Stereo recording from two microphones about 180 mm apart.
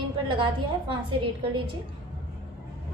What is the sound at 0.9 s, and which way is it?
Speech, 30° right (ahead or behind).